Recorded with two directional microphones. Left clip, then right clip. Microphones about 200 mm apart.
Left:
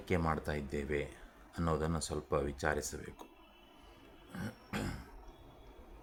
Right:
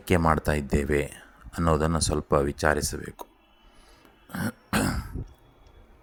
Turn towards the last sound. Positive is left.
turn(degrees=-40)  # may be behind; listen again after turning